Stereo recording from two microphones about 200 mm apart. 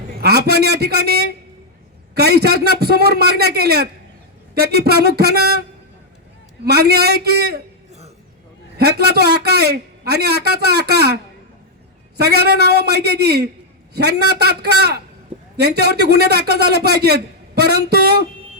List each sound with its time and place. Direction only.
0.2 s a man's voice: 50° right (ahead or behind)
6.7 s a man's voice: 50° right (ahead or behind)
8.8 s a man's voice: 55° right (ahead or behind)